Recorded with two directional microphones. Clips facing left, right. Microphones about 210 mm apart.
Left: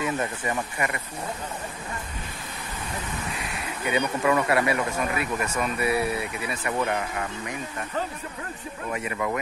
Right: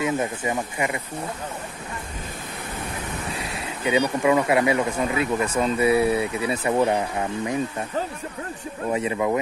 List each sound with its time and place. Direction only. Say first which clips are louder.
0.0 s speech: right 3 dB; 15° right (ahead or behind)
3.8 s speech: right 4 dB; 15° right (ahead or behind)
8.9 s speech: right 6 dB; 25° right (ahead or behind)